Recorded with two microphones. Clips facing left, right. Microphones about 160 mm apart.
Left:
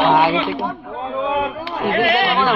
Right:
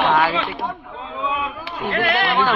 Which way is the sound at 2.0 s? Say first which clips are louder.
Left 2 dB; 15° left (ahead or behind).